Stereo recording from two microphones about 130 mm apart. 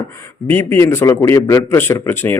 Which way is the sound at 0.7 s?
20° left (ahead or behind).